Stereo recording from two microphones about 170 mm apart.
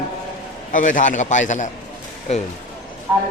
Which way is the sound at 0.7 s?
50° left (ahead or behind).